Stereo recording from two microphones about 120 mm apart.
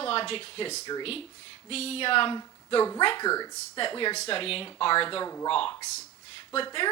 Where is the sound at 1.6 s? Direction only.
55° left (ahead or behind).